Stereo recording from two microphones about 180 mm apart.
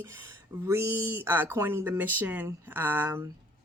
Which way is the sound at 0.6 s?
15° right (ahead or behind).